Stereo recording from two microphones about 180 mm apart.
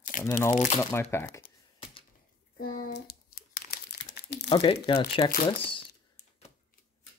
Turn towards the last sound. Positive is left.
turn(degrees=30)  # may be behind; listen again after turning